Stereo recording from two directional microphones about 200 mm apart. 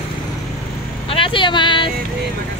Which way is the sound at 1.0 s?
25° left (ahead or behind).